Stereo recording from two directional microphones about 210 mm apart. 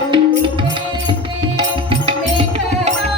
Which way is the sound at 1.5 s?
25° right (ahead or behind).